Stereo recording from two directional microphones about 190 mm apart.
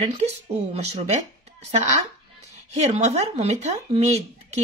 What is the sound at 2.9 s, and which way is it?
A woman's voice, 35° right (ahead or behind).